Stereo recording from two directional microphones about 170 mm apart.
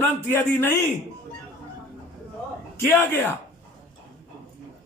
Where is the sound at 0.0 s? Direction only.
15° left (ahead or behind).